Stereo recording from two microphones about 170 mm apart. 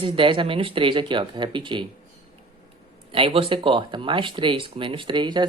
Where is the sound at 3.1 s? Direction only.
35° right (ahead or behind).